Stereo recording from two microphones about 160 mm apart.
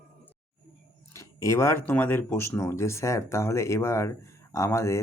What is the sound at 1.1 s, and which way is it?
Speech, 20° left (ahead or behind).